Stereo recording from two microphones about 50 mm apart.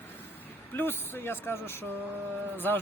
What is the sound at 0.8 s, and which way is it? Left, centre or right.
Speech, left.